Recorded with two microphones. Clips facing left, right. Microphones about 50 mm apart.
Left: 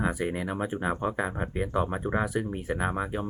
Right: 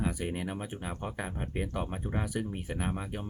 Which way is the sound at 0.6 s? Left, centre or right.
Left.